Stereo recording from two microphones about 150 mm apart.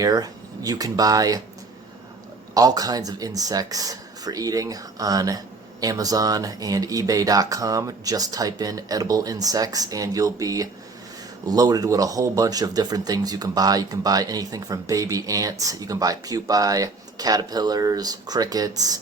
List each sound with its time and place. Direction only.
0.0 s speech: 25° right (ahead or behind)
2.6 s speech: 25° right (ahead or behind)